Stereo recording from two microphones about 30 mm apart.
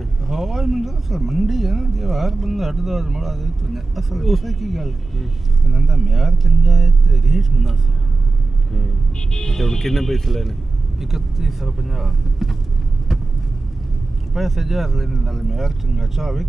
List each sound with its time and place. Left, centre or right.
0.3 s speech: centre
9.3 s speech: centre
9.6 s speech: centre
11.0 s speech: centre
14.3 s speech: centre